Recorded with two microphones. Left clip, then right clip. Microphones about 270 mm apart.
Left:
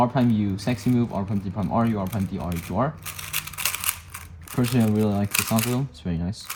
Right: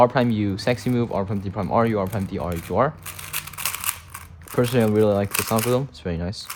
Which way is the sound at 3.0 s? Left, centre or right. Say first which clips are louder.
Left 1 dB; centre.